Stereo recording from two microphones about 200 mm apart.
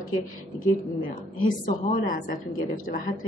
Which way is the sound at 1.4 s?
40° left (ahead or behind).